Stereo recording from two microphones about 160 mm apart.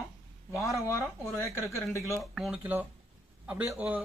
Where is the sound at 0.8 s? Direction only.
15° left (ahead or behind).